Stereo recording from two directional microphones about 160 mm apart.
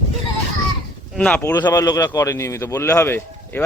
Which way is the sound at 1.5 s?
25° left (ahead or behind).